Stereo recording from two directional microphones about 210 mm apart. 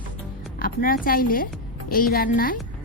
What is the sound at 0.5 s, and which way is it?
A woman's voice, 45° left (ahead or behind).